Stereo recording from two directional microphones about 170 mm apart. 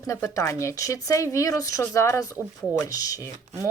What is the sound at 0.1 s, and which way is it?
Speech, 15° left (ahead or behind).